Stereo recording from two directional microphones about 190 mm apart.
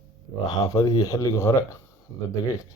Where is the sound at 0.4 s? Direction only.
20° left (ahead or behind).